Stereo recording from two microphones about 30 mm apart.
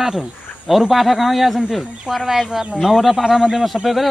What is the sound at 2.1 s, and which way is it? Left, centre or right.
Speech, right.